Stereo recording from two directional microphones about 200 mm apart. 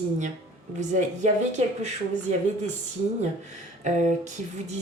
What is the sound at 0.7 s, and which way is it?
Speech, 35° right (ahead or behind).